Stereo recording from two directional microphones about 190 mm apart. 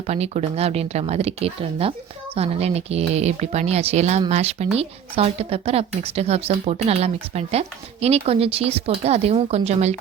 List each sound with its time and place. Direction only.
0.1 s speech: 35° right (ahead or behind)